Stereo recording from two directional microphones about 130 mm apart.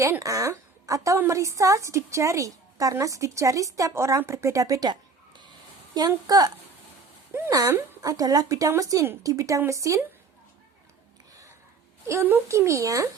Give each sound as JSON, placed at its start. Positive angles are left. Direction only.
{"t": 0.0, "sound": "a woman's voice", "side_deg": -25}
{"t": 7.3, "sound": "a woman's voice", "side_deg": -20}
{"t": 12.0, "sound": "a woman's voice", "side_deg": -20}